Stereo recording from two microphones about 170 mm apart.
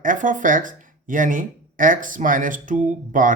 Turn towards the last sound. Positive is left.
turn(degrees=-50)  # may be behind; listen again after turning